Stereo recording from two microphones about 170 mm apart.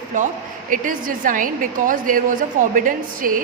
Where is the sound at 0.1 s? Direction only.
50° right (ahead or behind).